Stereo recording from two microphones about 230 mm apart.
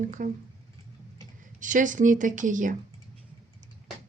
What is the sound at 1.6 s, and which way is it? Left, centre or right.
Speech, right.